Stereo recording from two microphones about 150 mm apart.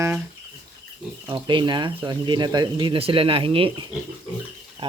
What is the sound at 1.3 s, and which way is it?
Speech, 30° right (ahead or behind).